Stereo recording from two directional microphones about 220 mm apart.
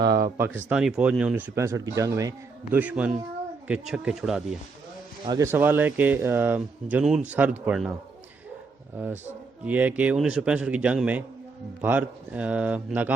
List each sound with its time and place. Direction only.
0.0 s a man's voice: 15° right (ahead or behind)
5.2 s speech: 15° right (ahead or behind)
9.6 s a man's voice: 5° right (ahead or behind)